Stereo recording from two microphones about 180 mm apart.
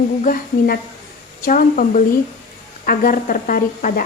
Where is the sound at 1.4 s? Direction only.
50° left (ahead or behind).